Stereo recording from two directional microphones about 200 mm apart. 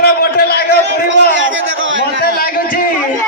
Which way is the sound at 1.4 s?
75° right (ahead or behind).